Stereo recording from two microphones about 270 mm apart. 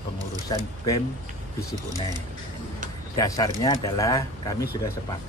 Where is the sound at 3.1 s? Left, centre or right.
Centre.